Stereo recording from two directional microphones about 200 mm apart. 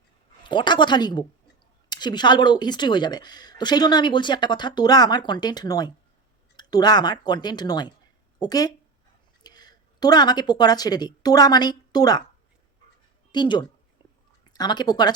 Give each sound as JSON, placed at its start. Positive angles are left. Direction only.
{"t": 0.4, "sound": "speech", "side_deg": 25}
{"t": 13.3, "sound": "speech", "side_deg": 20}